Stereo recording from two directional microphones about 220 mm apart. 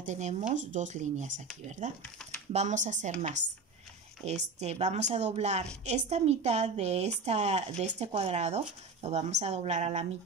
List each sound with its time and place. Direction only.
0.0 s a woman's voice: 30° right (ahead or behind)